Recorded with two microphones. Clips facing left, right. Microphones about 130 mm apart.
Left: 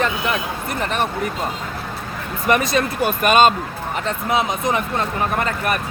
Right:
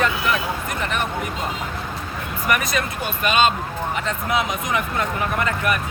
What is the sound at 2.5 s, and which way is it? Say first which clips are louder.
Speech: left 5 dB; 30° left (ahead or behind).